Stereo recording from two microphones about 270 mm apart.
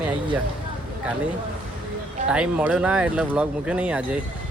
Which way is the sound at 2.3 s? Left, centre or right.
Centre.